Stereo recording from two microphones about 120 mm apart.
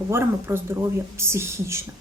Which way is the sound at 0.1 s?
20° right (ahead or behind).